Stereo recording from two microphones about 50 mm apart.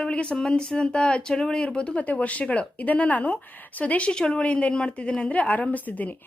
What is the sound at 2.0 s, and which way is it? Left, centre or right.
A woman's voice, left.